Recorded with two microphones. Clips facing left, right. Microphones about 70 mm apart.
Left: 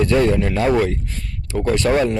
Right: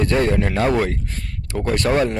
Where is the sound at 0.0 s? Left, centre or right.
Right.